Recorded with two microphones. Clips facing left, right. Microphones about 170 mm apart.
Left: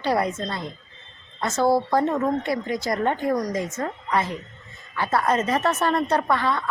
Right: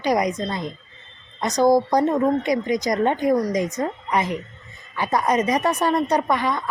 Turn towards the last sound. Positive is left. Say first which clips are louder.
# right 1 dB
turn(degrees=-15)  # may be behind; listen again after turning